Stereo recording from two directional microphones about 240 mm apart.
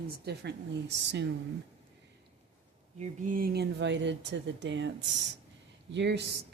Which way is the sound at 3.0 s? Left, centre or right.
Right.